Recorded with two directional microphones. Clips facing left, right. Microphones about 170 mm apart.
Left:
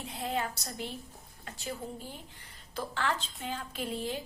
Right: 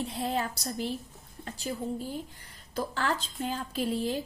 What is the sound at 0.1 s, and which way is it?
Speech, 35° right (ahead or behind).